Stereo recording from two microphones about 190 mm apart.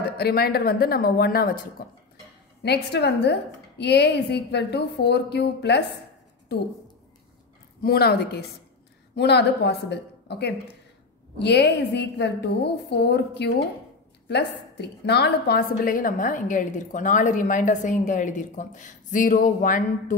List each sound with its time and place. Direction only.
0.2 s a woman's voice: 55° left (ahead or behind)
2.6 s a woman's voice: 60° left (ahead or behind)
7.8 s a woman's voice: 55° left (ahead or behind)